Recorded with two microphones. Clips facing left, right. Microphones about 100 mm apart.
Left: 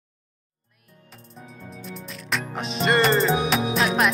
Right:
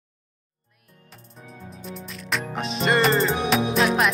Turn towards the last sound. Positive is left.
turn(degrees=0)  # may be behind; listen again after turning